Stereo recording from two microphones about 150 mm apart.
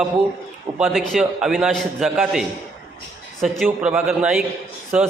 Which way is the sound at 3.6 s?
5° right (ahead or behind).